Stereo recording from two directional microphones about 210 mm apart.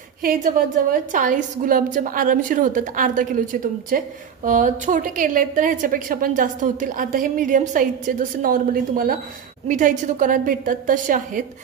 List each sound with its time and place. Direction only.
0.2 s a woman's voice: 40° right (ahead or behind)